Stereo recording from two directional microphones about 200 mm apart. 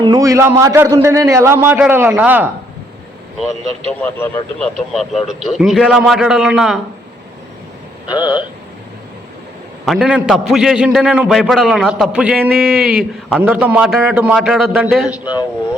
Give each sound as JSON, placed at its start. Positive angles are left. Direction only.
{"t": 0.0, "sound": "speech", "side_deg": -20}
{"t": 4.0, "sound": "speech", "side_deg": 10}
{"t": 5.3, "sound": "a man's voice", "side_deg": 0}
{"t": 8.0, "sound": "speech", "side_deg": 20}
{"t": 9.8, "sound": "a man's voice", "side_deg": 0}
{"t": 15.2, "sound": "speech", "side_deg": 20}